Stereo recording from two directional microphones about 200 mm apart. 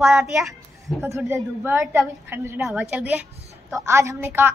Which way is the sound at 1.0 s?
15° right (ahead or behind).